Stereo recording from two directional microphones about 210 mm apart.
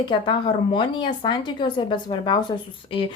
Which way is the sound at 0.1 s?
25° left (ahead or behind).